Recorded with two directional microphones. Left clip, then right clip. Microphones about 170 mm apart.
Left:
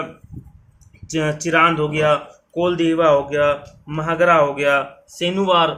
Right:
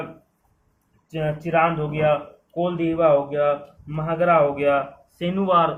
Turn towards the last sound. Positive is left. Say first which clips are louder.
# left 3 dB
turn(degrees=25)  # may be behind; listen again after turning